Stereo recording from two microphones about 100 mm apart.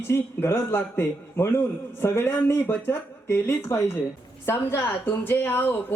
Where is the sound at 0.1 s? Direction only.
25° left (ahead or behind).